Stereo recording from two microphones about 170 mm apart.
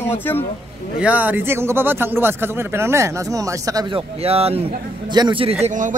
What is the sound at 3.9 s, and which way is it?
A man's voice, 35° right (ahead or behind).